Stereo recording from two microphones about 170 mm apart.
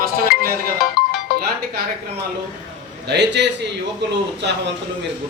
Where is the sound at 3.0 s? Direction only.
90° right.